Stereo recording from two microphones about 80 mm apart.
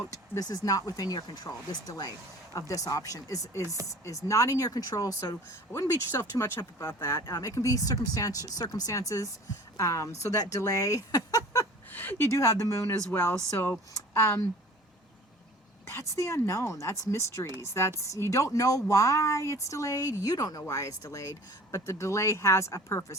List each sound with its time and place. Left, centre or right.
0.3 s speech: left
2.5 s speech: left
7.2 s speech: left
11.9 s a woman's voice: left
12.3 s speech: left
13.1 s speech: left
15.9 s speech: left